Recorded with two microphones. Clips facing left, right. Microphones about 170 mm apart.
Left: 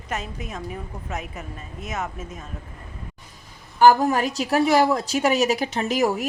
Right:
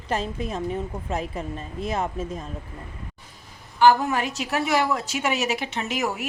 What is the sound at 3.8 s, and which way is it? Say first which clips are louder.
A woman's voice: left 2 dB; 40° left (ahead or behind).